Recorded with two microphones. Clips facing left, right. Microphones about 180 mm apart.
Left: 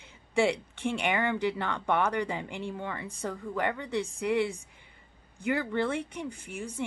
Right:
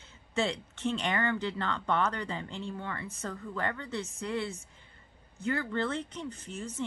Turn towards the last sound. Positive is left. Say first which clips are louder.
# left 1 dB
turn(degrees=10)  # may be behind; listen again after turning